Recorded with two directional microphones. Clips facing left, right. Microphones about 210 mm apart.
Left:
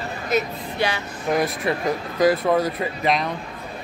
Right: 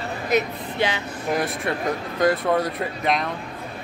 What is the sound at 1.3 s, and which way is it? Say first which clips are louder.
Speech: left 3 dB; centre (ahead or behind).